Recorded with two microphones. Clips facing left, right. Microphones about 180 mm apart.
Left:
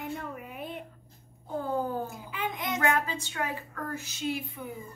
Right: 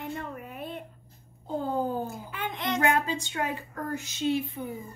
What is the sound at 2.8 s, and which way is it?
Speech, 25° right (ahead or behind).